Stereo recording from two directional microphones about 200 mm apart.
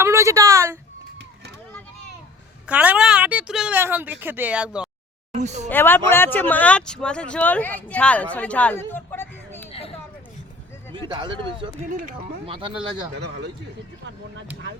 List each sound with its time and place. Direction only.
0.0 s speech: 15° right (ahead or behind)
2.6 s a woman's voice: 5° right (ahead or behind)
5.3 s speech: 35° right (ahead or behind)
5.6 s speech: 10° left (ahead or behind)
10.9 s speech: 25° right (ahead or behind)
13.1 s speech: 60° right (ahead or behind)